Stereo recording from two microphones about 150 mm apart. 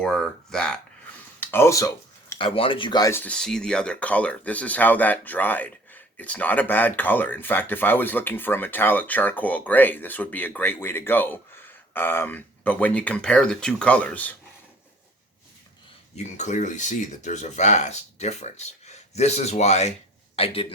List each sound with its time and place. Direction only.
0.0 s speech: 5° left (ahead or behind); by 1.9 s 20° left (ahead or behind)
2.4 s speech: 35° left (ahead or behind)
3.1 s speech: 10° left (ahead or behind)
16.1 s a man's voice: 50° left (ahead or behind)